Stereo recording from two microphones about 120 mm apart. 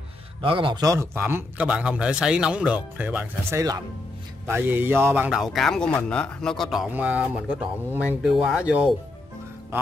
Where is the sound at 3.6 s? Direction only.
30° right (ahead or behind).